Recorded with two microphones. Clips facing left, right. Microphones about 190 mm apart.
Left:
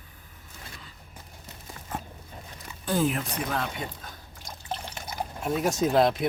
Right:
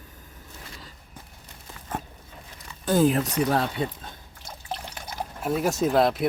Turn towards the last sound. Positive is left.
turn(degrees=0)  # may be behind; listen again after turning